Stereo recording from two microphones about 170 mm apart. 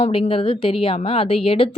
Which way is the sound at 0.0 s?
35° left (ahead or behind).